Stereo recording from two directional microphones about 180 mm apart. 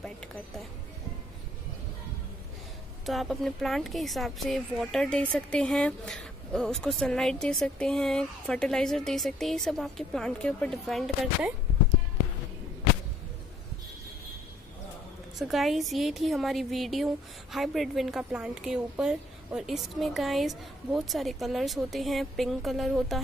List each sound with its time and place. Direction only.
3.1 s a woman's voice: centre (ahead or behind)
15.3 s a woman's voice: centre (ahead or behind)